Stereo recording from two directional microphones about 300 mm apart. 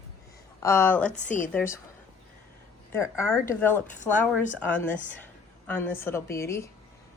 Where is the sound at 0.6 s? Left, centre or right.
Centre.